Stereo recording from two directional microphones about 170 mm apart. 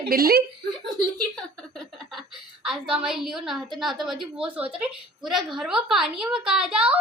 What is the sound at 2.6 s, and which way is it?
A woman's voice, 5° right (ahead or behind).